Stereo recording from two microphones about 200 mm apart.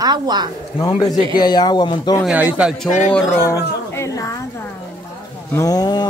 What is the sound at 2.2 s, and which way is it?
A woman's voice, 10° right (ahead or behind).